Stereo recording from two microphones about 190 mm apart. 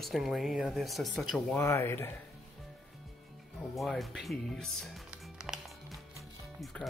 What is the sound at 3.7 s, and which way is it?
Music, centre (ahead or behind).